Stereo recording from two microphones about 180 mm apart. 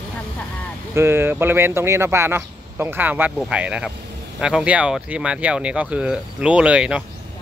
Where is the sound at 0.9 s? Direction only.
15° right (ahead or behind).